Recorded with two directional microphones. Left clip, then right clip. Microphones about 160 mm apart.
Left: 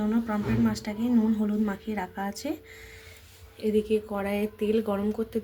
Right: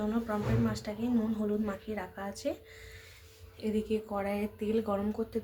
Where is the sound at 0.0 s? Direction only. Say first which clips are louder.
Left 4 dB; 20° left (ahead or behind).